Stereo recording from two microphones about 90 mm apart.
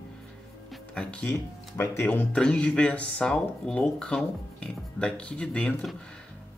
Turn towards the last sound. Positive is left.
turn(degrees=15)  # may be behind; listen again after turning